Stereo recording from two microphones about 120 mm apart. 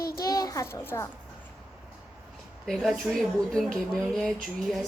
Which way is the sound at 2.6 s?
Centre (ahead or behind).